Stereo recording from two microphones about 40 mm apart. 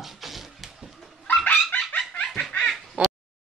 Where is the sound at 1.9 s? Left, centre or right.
Left.